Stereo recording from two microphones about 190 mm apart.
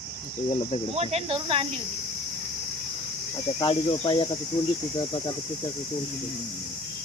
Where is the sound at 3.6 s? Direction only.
30° left (ahead or behind).